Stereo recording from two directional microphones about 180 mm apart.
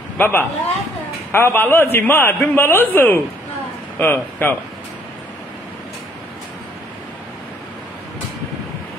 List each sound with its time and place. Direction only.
0.2 s speech: 10° left (ahead or behind)